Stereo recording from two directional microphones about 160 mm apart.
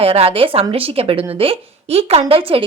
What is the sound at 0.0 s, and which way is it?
Speech, 40° right (ahead or behind).